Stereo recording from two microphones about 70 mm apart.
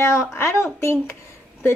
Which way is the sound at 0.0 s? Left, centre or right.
Left.